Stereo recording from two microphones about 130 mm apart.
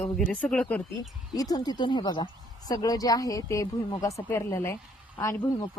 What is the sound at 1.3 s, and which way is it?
A woman's voice, 30° left (ahead or behind).